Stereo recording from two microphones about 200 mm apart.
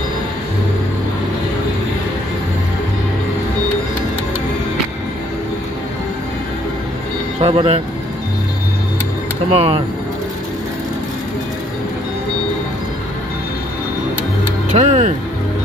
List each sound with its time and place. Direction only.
7.4 s speech: 30° right (ahead or behind)
9.6 s speech: 30° right (ahead or behind)
14.7 s speech: 35° right (ahead or behind)